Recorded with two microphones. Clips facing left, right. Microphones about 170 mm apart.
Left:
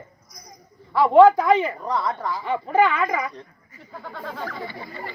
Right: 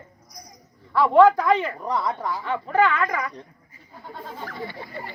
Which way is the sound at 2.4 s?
15° left (ahead or behind).